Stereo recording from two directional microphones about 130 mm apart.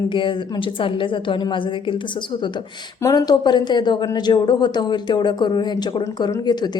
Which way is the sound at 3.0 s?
25° left (ahead or behind).